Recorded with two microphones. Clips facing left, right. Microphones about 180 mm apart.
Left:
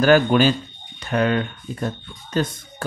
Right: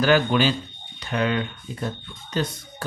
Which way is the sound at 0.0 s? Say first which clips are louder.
Left 4 dB; 50° left (ahead or behind).